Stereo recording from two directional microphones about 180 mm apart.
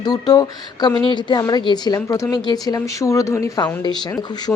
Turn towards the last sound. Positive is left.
turn(degrees=10)  # may be behind; listen again after turning